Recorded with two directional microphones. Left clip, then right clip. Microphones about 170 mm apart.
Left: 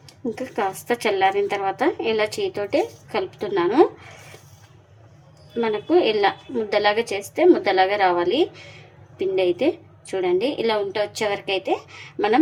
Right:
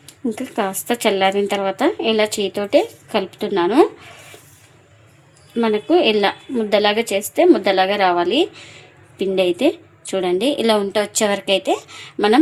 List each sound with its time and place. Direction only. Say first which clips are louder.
0.0 s speech: right 3 dB; 40° right (ahead or behind)
5.5 s a woman's voice: right 3 dB; 40° right (ahead or behind)